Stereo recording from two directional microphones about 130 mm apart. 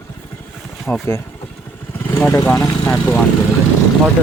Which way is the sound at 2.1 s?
15° left (ahead or behind).